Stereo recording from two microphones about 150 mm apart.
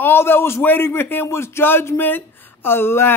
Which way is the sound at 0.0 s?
15° left (ahead or behind).